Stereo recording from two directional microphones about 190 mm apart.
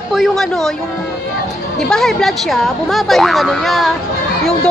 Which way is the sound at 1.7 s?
5° left (ahead or behind).